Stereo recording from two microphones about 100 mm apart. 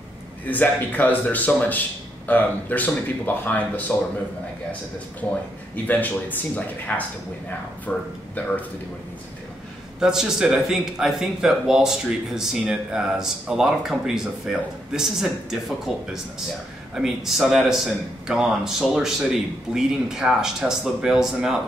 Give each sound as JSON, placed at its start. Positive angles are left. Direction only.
{"t": 0.5, "sound": "speech", "side_deg": 15}
{"t": 5.2, "sound": "speech", "side_deg": 15}
{"t": 9.9, "sound": "speech", "side_deg": -5}